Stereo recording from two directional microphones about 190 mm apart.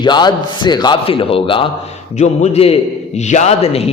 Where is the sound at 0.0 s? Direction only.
25° left (ahead or behind).